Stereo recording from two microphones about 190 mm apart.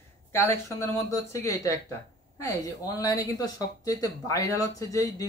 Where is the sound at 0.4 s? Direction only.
15° left (ahead or behind).